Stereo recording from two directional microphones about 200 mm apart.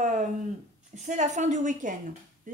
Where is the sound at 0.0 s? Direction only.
40° right (ahead or behind).